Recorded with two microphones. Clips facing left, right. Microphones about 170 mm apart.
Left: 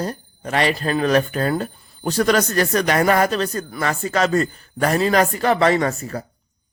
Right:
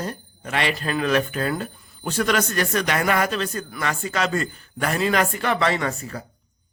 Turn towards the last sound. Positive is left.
turn(degrees=40)  # may be behind; listen again after turning